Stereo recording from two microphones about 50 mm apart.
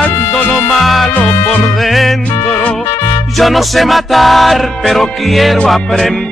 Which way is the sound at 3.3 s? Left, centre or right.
Centre.